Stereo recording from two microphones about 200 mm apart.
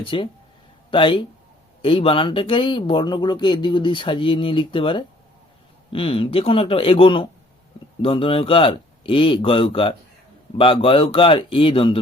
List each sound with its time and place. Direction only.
0.0 s speech: 25° left (ahead or behind)